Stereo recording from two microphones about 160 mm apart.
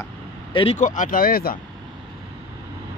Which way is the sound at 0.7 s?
55° left (ahead or behind).